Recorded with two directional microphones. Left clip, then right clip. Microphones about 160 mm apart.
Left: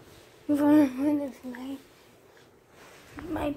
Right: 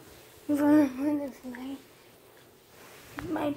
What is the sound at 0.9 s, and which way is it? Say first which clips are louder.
Speech: left 2 dB; 20° left (ahead or behind).